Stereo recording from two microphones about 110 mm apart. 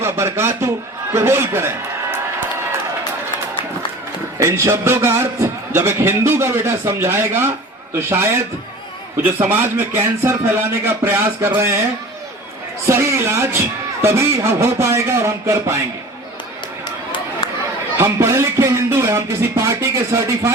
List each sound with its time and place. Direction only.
0.0 s a man's voice: 25° right (ahead or behind)
4.4 s a man's voice: 25° right (ahead or behind)
12.9 s a man's voice: 25° right (ahead or behind)
17.9 s a man's voice: 25° right (ahead or behind)